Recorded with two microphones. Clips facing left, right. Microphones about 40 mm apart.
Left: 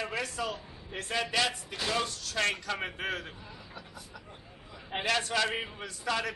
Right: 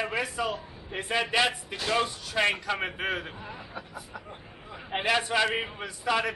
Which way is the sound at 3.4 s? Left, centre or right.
Right.